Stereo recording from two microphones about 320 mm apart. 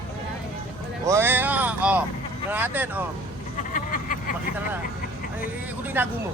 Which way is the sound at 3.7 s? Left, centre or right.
Left.